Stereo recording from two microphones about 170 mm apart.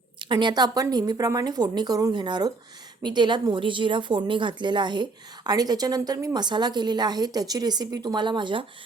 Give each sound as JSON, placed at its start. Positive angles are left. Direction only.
{"t": 0.2, "sound": "a woman's voice", "side_deg": -25}